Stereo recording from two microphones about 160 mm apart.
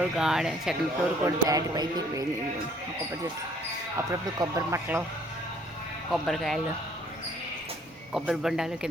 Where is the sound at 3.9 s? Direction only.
20° right (ahead or behind).